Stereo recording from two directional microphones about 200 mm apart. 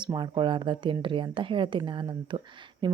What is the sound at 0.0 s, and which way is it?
Speech, 20° right (ahead or behind).